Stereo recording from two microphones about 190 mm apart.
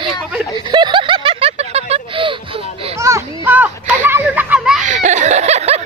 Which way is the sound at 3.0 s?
10° right (ahead or behind).